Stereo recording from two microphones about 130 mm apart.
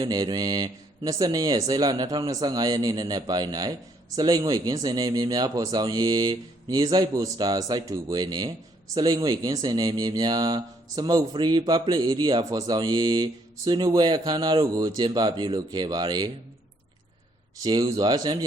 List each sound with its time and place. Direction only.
0.0 s a man's voice: 30° right (ahead or behind)
17.6 s speech: 30° right (ahead or behind)